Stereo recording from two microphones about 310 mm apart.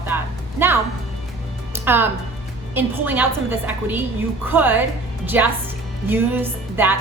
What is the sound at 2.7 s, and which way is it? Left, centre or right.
A woman's voice, centre.